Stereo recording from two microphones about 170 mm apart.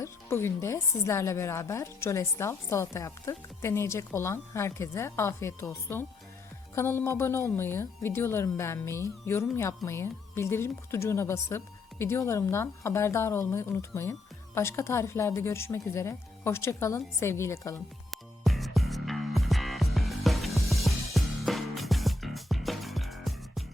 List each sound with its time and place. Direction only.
0.0 s a woman's voice: 15° left (ahead or behind)
18.1 s music: centre (ahead or behind)